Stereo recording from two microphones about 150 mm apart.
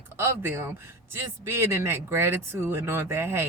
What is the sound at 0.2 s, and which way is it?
Speech, 15° right (ahead or behind).